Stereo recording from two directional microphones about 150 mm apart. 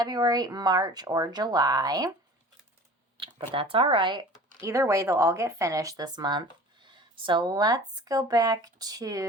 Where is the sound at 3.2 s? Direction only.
35° right (ahead or behind).